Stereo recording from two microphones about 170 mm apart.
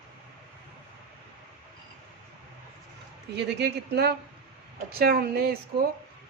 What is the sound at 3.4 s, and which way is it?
A woman's voice, 80° right.